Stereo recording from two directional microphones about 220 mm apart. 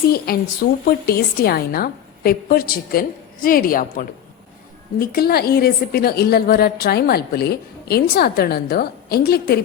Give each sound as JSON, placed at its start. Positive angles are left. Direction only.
{"t": 0.1, "sound": "a woman's voice", "side_deg": 45}